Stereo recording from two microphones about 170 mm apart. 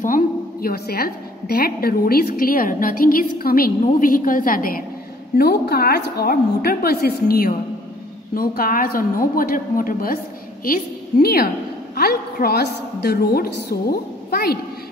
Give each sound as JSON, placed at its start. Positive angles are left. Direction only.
{"t": 0.0, "sound": "a woman's voice", "side_deg": 55}